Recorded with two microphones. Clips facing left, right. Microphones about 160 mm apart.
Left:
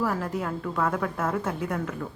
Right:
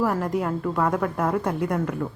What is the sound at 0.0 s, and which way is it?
A woman's voice, 10° right (ahead or behind).